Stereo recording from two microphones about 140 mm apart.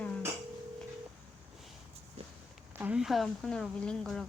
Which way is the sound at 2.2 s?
50° right (ahead or behind).